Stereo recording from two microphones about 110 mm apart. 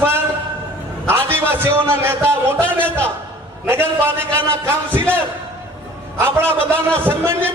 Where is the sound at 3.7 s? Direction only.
20° right (ahead or behind).